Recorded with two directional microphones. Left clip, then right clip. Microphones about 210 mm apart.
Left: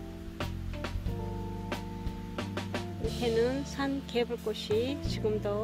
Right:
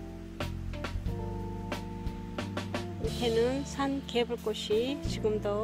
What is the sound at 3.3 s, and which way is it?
Music, 15° right (ahead or behind).